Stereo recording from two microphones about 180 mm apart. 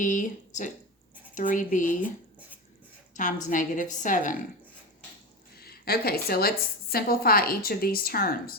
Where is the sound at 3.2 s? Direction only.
45° left (ahead or behind).